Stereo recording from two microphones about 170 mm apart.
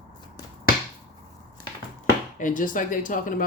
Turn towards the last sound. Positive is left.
turn(degrees=50)  # may be behind; listen again after turning